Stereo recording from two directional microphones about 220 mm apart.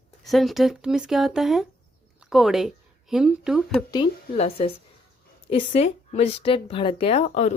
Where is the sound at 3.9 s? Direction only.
25° left (ahead or behind).